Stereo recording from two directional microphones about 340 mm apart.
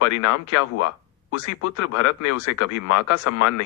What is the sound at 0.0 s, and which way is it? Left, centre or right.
A man's voice, left.